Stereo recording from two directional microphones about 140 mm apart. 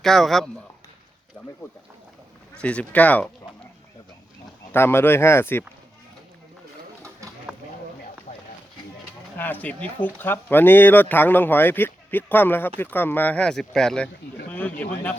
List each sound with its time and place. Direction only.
0.0 s speech: centre (ahead or behind)
2.6 s speech: 10° left (ahead or behind)
4.7 s speech: 15° left (ahead or behind)
8.3 s a sound: 75° left (ahead or behind)
9.4 s a man's voice: 10° left (ahead or behind)